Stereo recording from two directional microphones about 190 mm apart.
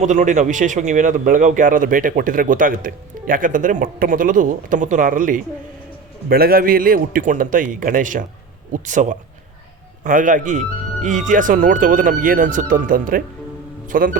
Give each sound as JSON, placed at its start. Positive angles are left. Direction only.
{"t": 0.0, "sound": "a man's voice", "side_deg": -40}